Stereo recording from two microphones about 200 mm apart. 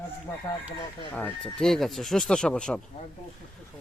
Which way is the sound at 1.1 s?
5° left (ahead or behind).